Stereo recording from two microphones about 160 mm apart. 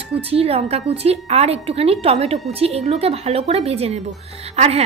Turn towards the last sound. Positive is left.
turn(degrees=-40)  # may be behind; listen again after turning